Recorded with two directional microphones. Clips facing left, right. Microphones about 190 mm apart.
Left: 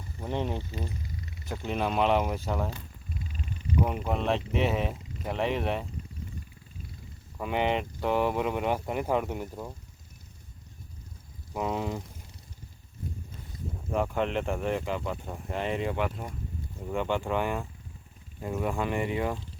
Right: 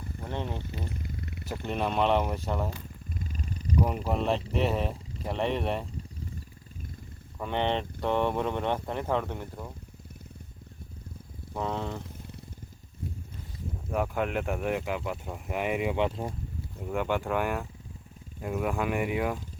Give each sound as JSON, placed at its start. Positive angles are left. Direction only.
{"t": 0.2, "sound": "speech", "side_deg": 15}
{"t": 0.6, "sound": "wild animals", "side_deg": -60}
{"t": 1.6, "sound": "speech", "side_deg": 0}
{"t": 3.2, "sound": "purr", "side_deg": -45}
{"t": 3.8, "sound": "speech", "side_deg": 0}
{"t": 7.3, "sound": "speech", "side_deg": 5}
{"t": 11.5, "sound": "speech", "side_deg": 10}
{"t": 13.9, "sound": "speech", "side_deg": -5}
{"t": 16.0, "sound": "speech", "side_deg": -25}
{"t": 16.8, "sound": "speech", "side_deg": -5}